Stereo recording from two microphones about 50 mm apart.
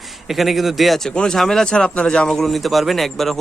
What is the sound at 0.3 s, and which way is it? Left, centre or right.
Speech, centre.